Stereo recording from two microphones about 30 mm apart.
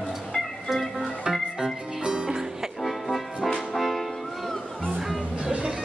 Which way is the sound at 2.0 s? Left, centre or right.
Right.